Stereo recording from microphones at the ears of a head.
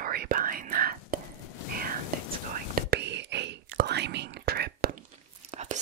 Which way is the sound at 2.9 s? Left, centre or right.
Right.